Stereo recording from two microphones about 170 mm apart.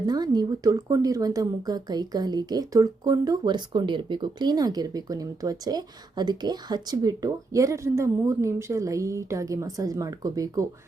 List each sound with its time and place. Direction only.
0.0 s speech: 25° right (ahead or behind)